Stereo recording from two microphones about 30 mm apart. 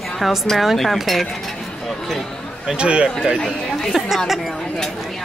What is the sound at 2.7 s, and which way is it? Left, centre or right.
Speech, right.